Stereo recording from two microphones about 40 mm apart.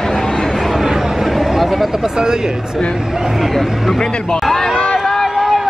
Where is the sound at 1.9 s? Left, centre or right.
Centre.